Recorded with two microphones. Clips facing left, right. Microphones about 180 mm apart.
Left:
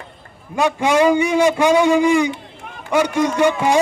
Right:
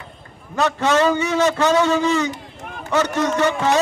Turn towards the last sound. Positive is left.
turn(degrees=10)  # may be behind; listen again after turning